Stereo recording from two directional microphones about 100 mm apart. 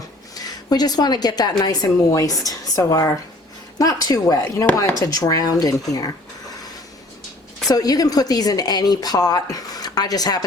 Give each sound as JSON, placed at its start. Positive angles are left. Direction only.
{"t": 0.3, "sound": "a woman's voice", "side_deg": 40}
{"t": 7.7, "sound": "a woman's voice", "side_deg": 40}